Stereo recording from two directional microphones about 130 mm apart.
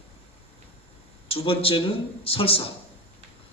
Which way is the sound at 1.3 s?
45° left (ahead or behind).